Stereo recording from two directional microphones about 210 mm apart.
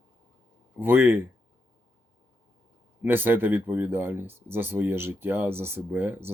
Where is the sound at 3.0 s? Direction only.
10° right (ahead or behind).